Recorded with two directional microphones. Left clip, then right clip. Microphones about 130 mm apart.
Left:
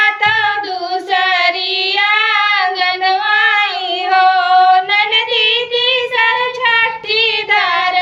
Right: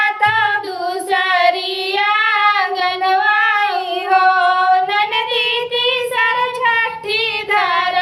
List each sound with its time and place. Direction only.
1.1 s child singing: 30° left (ahead or behind)
4.1 s female singing: 25° left (ahead or behind)
5.8 s child singing: 25° left (ahead or behind)